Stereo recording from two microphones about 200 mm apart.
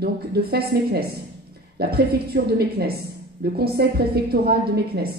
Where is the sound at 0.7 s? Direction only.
55° right (ahead or behind).